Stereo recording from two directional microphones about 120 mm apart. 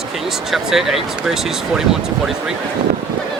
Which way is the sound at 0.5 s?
5° right (ahead or behind).